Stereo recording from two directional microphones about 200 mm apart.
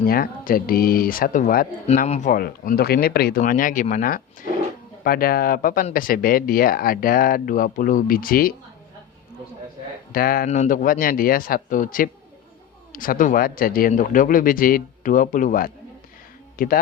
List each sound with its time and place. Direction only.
0.0 s speech: 45° left (ahead or behind)
10.1 s speech: 45° left (ahead or behind)